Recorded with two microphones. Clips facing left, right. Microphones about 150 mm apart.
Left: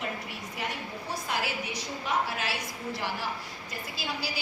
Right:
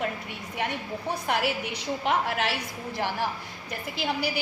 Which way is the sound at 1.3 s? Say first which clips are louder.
Right 5 dB; 65° right (ahead or behind).